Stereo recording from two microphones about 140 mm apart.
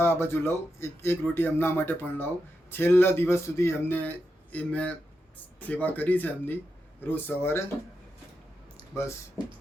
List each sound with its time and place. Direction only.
0.0 s speech: 15° left (ahead or behind)